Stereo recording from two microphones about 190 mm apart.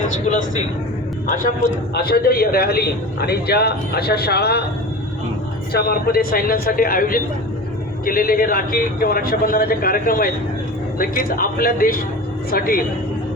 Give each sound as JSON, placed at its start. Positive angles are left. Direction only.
{"t": 2.0, "sound": "a man's voice", "side_deg": 55}
{"t": 5.7, "sound": "a man's voice", "side_deg": 55}